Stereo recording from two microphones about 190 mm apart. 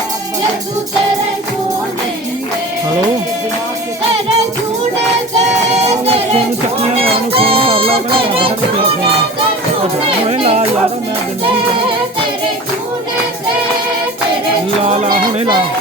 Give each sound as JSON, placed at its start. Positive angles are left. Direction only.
{"t": 5.8, "sound": "music", "side_deg": -30}
{"t": 10.2, "sound": "music", "side_deg": -30}
{"t": 14.8, "sound": "music", "side_deg": -35}